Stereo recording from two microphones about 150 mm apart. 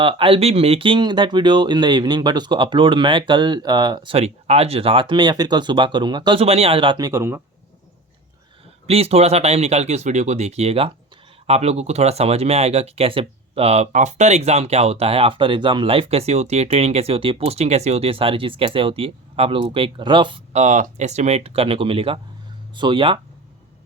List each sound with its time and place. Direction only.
0.0 s speech: 35° right (ahead or behind); by 7.4 s 15° right (ahead or behind)
8.9 s speech: 45° right (ahead or behind)
20.5 s speech: 55° right (ahead or behind); by 23.2 s 35° right (ahead or behind)